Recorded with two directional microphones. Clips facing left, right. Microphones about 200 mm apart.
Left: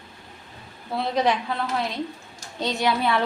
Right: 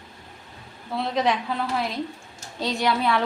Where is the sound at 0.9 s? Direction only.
Centre (ahead or behind).